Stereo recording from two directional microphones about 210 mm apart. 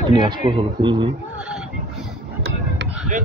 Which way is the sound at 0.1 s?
20° right (ahead or behind).